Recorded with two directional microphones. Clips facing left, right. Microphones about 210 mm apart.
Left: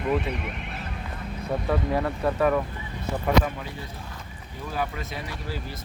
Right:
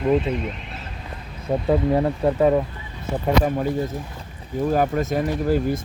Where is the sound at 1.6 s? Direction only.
25° right (ahead or behind).